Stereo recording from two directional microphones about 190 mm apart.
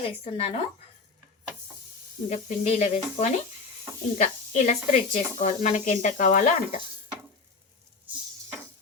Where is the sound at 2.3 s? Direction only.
40° left (ahead or behind).